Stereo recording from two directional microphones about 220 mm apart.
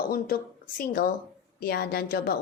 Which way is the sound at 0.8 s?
40° left (ahead or behind).